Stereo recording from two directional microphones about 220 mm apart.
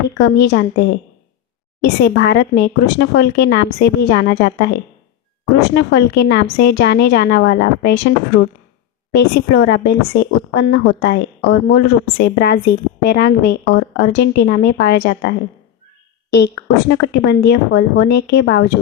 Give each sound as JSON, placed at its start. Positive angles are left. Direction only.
{"t": 0.1, "sound": "a woman's voice", "side_deg": 50}